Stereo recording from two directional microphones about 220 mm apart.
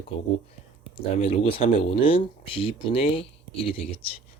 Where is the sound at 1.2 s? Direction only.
25° left (ahead or behind).